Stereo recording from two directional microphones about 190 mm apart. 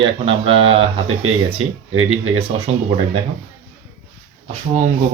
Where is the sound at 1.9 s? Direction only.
90° right.